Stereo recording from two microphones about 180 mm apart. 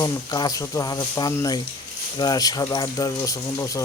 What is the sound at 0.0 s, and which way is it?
Speech, 20° left (ahead or behind).